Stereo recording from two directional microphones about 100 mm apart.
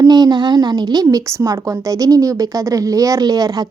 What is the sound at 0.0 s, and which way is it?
Speech, 45° right (ahead or behind).